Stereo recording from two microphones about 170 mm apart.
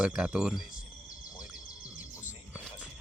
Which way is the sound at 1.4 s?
5° right (ahead or behind).